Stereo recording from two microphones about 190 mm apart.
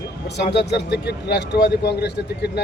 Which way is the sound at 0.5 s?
60° left (ahead or behind).